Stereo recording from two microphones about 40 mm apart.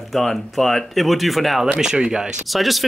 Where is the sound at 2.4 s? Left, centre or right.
Centre.